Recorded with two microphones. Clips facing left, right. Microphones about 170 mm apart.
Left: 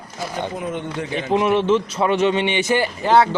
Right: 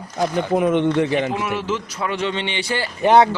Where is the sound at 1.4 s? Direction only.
25° left (ahead or behind).